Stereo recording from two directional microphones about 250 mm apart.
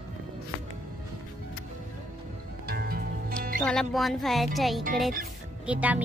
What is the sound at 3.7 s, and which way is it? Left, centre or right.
Speech, centre.